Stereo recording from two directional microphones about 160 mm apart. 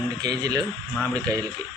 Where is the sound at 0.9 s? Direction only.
10° left (ahead or behind).